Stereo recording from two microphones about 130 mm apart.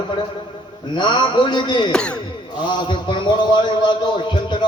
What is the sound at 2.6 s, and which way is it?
A man's voice, 35° left (ahead or behind).